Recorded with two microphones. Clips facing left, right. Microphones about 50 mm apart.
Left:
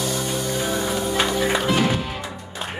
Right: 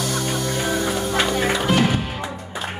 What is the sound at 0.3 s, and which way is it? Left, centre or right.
Music, right.